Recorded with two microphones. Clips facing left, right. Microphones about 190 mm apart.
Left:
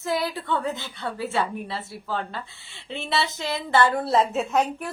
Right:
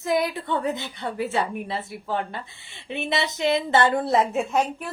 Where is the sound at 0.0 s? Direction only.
20° right (ahead or behind).